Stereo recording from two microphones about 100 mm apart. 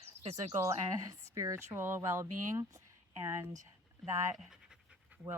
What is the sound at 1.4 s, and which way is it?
Speech, 30° right (ahead or behind).